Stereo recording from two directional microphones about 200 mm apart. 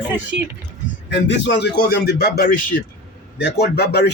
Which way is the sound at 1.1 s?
60° left (ahead or behind).